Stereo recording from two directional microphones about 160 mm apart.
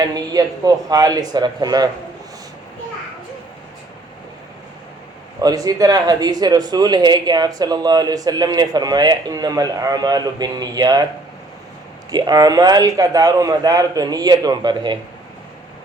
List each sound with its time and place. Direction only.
0.0 s speech: 25° right (ahead or behind)
5.4 s speech: 25° right (ahead or behind)
12.1 s speech: 25° right (ahead or behind)